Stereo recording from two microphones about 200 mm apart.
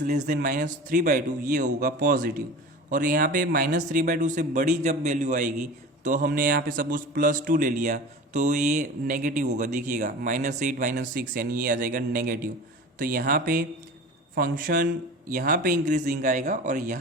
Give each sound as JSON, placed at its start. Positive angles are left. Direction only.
{"t": 0.0, "sound": "a man's voice", "side_deg": -40}